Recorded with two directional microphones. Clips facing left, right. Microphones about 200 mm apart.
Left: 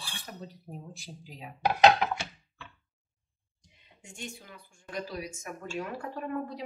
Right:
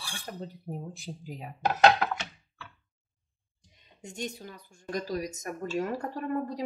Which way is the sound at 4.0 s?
40° right (ahead or behind).